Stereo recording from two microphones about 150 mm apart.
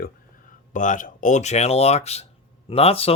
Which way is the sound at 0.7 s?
60° left (ahead or behind).